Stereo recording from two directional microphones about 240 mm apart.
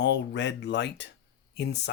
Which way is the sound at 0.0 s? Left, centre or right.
Left.